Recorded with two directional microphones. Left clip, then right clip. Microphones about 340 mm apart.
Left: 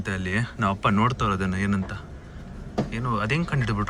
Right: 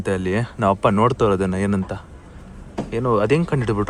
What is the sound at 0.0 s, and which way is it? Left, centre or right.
Speech, centre.